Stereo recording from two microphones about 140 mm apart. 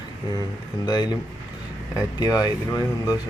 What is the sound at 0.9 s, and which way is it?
Speech, 30° left (ahead or behind).